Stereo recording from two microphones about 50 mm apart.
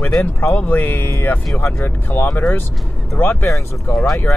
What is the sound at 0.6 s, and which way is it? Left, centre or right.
Speech, left.